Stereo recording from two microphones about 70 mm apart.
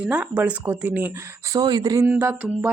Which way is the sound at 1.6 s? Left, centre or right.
Right.